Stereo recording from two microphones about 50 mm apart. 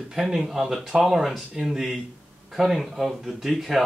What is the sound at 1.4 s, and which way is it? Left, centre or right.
Speech, centre.